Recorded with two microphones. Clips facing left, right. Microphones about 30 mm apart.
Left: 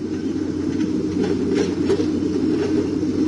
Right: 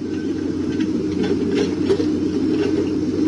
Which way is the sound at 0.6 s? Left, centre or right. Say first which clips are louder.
Right 1 dB; centre.